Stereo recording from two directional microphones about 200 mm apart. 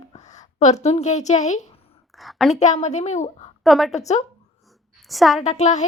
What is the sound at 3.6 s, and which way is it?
Speech, centre (ahead or behind).